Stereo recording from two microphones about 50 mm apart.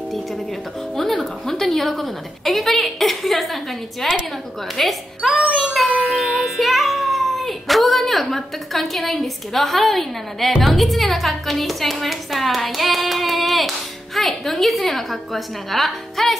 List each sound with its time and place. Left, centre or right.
0.9 s a woman's voice: centre
5.3 s music: right
6.0 s music: centre
10.6 s a woman's voice: centre